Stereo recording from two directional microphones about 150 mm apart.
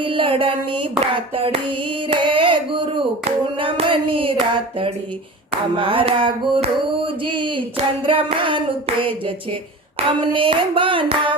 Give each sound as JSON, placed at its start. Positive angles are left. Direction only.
{"t": 0.0, "sound": "hands", "side_deg": -35}